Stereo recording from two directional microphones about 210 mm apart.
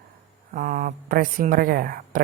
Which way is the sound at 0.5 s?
35° right (ahead or behind).